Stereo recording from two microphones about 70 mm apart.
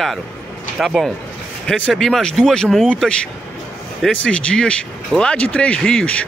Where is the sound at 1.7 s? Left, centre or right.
Centre.